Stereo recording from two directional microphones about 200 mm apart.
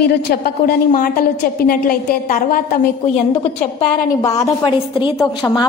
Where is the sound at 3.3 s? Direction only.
25° left (ahead or behind).